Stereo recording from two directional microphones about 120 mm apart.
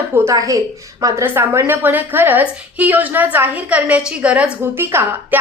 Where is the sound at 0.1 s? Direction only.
25° right (ahead or behind).